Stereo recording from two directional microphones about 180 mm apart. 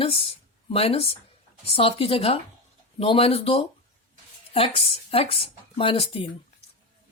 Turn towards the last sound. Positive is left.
turn(degrees=30)  # may be behind; listen again after turning